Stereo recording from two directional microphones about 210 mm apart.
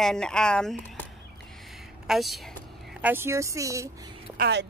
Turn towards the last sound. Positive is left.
turn(degrees=-55)  # may be behind; listen again after turning